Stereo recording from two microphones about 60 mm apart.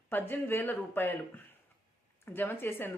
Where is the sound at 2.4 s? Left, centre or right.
Left.